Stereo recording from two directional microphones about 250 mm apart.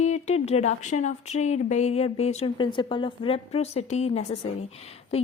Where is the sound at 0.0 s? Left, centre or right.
Left.